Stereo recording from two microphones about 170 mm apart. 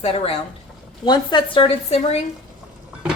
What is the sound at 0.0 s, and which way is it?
Speech, 35° left (ahead or behind).